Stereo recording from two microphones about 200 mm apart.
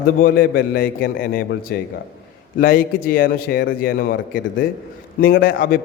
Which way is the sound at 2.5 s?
45° left (ahead or behind).